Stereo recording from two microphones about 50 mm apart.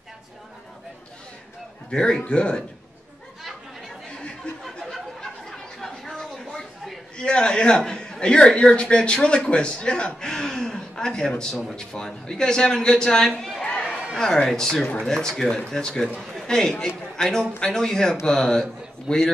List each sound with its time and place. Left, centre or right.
1.9 s a man's voice: centre
4.4 s a sound: left
4.9 s a sound: centre
7.2 s a man's voice: centre
13.7 s chatter: left
14.1 s a man's voice: centre